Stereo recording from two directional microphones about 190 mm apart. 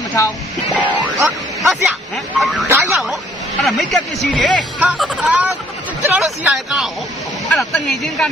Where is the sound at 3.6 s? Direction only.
Centre (ahead or behind).